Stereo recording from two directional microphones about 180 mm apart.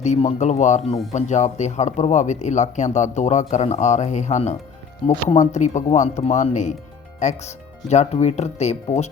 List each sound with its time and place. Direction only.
0.0 s speech: 40° left (ahead or behind)